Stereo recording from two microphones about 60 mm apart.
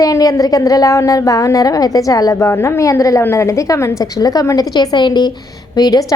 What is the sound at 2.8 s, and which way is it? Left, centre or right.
A woman's voice, left.